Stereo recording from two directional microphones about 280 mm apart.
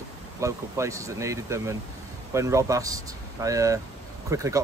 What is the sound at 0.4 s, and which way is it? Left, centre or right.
Speech, centre.